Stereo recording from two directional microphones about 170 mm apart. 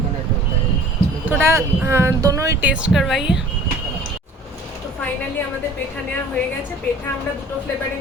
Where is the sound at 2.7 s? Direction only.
5° right (ahead or behind).